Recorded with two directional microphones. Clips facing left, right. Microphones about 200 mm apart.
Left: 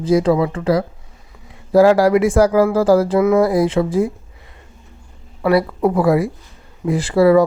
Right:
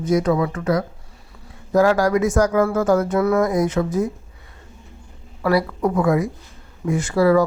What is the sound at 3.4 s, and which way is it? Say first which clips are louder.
Speech: left 4 dB; 30° left (ahead or behind).